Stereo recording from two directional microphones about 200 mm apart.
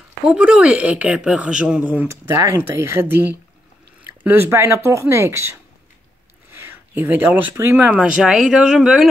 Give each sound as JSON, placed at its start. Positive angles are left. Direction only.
{"t": 0.2, "sound": "a woman's voice", "side_deg": -5}